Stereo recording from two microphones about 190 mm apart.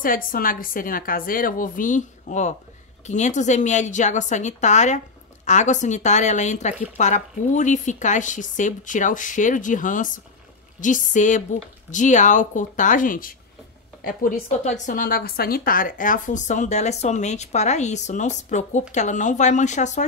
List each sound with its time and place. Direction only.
0.0 s a woman's voice: 50° left (ahead or behind)